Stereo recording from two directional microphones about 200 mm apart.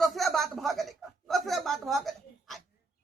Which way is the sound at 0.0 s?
Centre (ahead or behind).